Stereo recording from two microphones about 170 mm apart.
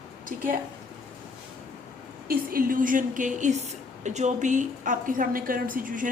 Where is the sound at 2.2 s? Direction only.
60° right (ahead or behind).